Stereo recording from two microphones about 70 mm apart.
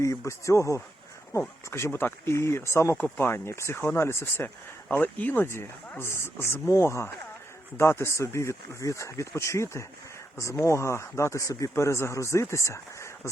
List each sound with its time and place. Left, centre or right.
0.0 s speech: left
4.4 s speech: left
11.7 s speech: left